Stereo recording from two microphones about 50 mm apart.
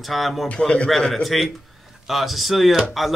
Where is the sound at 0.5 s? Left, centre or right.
Left.